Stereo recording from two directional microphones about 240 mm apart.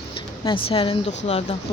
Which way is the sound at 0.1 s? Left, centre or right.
Left.